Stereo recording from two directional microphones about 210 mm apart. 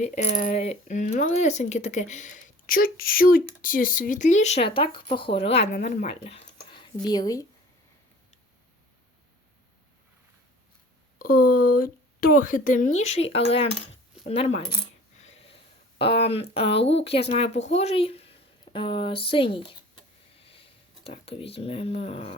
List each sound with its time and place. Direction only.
0.0 s speech: 30° left (ahead or behind)
7.0 s speech: 20° left (ahead or behind)
11.2 s speech: 40° left (ahead or behind)
14.3 s speech: 30° left (ahead or behind)
15.2 s wheeze: 30° left (ahead or behind)
16.0 s speech: 25° left (ahead or behind)